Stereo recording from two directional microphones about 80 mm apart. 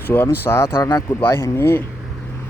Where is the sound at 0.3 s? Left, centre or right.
Left.